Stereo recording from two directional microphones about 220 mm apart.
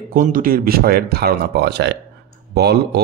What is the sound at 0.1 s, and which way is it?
A man's voice, 40° right (ahead or behind).